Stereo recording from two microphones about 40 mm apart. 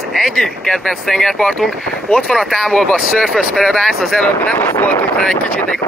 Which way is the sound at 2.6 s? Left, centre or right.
Centre.